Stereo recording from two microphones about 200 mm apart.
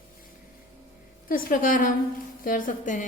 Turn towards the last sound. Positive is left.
turn(degrees=40)  # may be behind; listen again after turning